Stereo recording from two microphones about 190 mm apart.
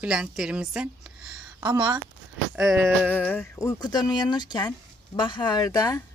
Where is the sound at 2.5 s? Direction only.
Centre (ahead or behind).